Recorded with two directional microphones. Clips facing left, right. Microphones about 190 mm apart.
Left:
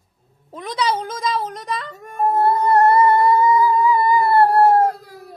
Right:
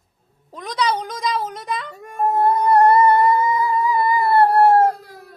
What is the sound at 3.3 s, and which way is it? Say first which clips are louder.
Howl: left 4 dB; 25° right (ahead or behind).